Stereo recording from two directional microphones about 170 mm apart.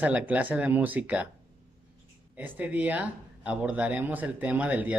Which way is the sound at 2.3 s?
10° right (ahead or behind).